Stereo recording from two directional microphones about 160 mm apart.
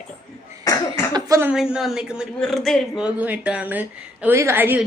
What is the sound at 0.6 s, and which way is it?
Cough, 20° left (ahead or behind).